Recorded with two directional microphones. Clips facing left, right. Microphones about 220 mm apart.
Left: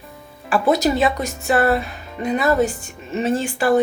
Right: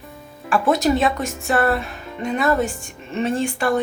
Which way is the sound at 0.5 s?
Centre (ahead or behind).